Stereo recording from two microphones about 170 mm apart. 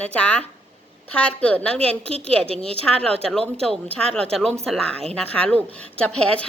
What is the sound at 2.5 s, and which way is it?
Speech, 35° right (ahead or behind).